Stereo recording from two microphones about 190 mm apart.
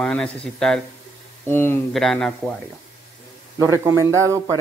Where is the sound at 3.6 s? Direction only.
15° right (ahead or behind).